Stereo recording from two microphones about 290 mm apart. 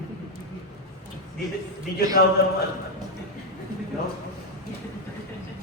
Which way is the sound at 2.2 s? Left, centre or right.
Left.